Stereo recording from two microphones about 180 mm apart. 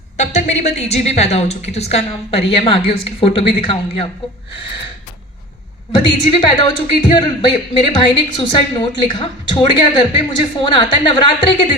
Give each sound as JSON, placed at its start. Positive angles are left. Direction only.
{"t": 0.2, "sound": "a woman's voice", "side_deg": 40}
{"t": 6.1, "sound": "a woman's voice", "side_deg": 25}